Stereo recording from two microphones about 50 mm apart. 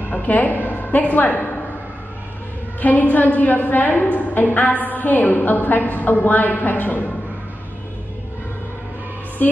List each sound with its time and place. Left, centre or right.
0.1 s a woman's voice: left
2.8 s a woman's voice: left